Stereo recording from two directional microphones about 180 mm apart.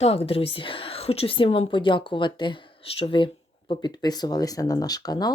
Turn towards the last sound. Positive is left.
turn(degrees=20)  # may be behind; listen again after turning